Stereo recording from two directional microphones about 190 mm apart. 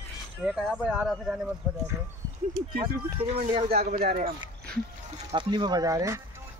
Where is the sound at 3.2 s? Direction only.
30° right (ahead or behind).